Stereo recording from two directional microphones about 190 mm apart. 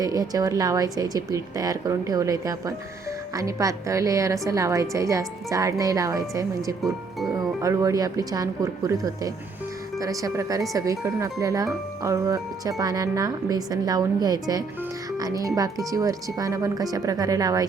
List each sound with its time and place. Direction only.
0.0 s a woman's voice: 20° right (ahead or behind)
6.8 s speech: centre (ahead or behind)
7.6 s a woman's voice: 15° right (ahead or behind)